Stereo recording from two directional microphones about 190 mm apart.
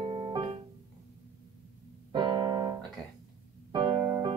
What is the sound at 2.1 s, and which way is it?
Keyboard, 20° right (ahead or behind).